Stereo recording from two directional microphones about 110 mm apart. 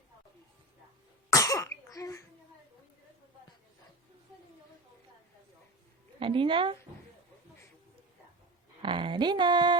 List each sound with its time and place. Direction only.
1.3 s cough: 30° left (ahead or behind)
6.1 s speech: 55° right (ahead or behind)
8.8 s speech: 50° right (ahead or behind)